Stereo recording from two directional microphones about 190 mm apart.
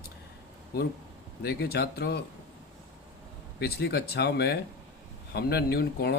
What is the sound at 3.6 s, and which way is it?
Speech, 60° left (ahead or behind).